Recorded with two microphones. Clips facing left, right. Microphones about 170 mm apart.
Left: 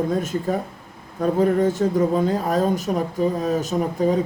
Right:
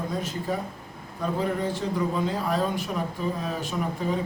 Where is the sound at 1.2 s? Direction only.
45° left (ahead or behind).